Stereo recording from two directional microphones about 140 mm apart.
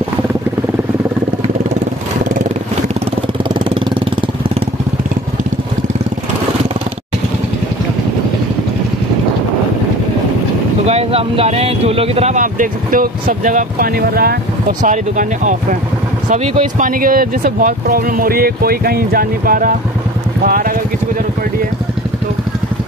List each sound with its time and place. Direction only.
3.5 s vehicle: 35° right (ahead or behind)
10.9 s a sound: 45° right (ahead or behind)
12.4 s speech: 75° right (ahead or behind); by 20.7 s 90° right